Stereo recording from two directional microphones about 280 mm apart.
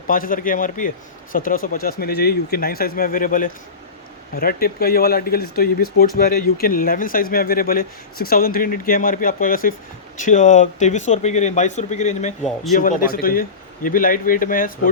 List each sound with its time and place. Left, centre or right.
0.1 s a man's voice: left
12.4 s a man's voice: centre
12.7 s a man's voice: left